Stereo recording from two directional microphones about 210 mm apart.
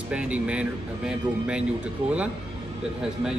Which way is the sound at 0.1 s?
5° right (ahead or behind).